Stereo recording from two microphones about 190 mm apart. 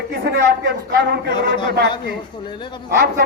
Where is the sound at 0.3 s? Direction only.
60° right (ahead or behind).